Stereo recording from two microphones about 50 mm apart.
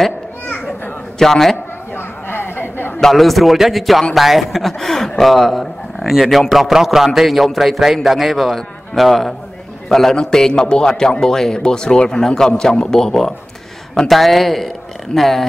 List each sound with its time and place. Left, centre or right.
1.2 s a man's voice: centre
2.0 s a sound: left
3.0 s a man's voice: centre